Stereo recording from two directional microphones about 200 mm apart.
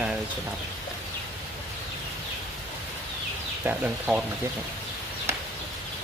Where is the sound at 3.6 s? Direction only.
5° right (ahead or behind).